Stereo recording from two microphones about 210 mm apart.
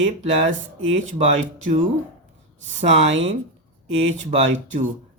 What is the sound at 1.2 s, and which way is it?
Speech, 30° right (ahead or behind).